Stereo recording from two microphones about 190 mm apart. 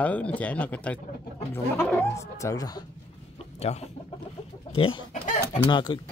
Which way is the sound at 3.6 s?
30° left (ahead or behind).